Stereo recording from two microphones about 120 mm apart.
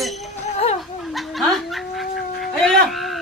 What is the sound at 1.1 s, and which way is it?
Cat, centre (ahead or behind).